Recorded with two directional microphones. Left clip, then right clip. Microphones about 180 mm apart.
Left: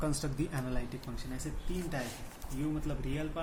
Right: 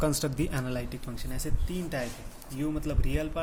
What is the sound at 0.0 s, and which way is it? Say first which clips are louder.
Speech: right 7 dB; 55° right (ahead or behind).